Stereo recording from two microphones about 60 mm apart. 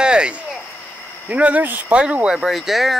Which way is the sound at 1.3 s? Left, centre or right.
Right.